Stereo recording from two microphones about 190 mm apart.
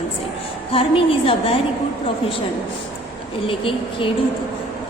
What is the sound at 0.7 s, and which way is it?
Speech, 30° left (ahead or behind).